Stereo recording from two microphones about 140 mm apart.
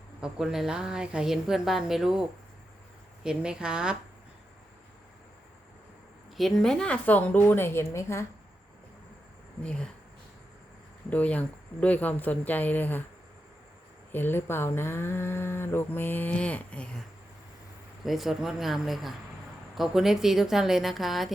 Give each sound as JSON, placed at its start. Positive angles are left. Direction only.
{"t": 0.2, "sound": "a woman's voice", "side_deg": -5}
{"t": 3.2, "sound": "a woman's voice", "side_deg": -5}
{"t": 6.3, "sound": "speech", "side_deg": 0}
{"t": 9.6, "sound": "speech", "side_deg": 5}
{"t": 11.1, "sound": "speech", "side_deg": 10}
{"t": 14.1, "sound": "speech", "side_deg": 15}
{"t": 18.0, "sound": "a woman's voice", "side_deg": 0}